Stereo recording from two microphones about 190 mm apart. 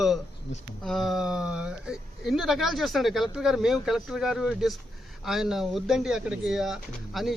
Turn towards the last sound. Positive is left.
turn(degrees=0)  # may be behind; listen again after turning